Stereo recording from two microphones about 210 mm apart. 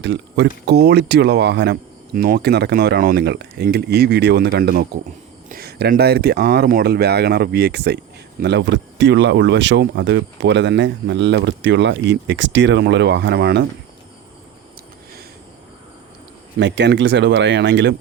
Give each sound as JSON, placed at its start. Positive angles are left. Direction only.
{"t": 0.0, "sound": "speech", "side_deg": -55}
{"t": 16.6, "sound": "speech", "side_deg": -55}